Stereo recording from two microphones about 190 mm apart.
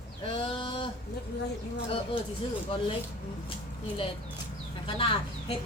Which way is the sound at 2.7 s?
30° left (ahead or behind).